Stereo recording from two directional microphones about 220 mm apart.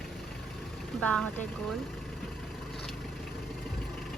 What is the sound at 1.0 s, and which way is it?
Speech, 5° left (ahead or behind).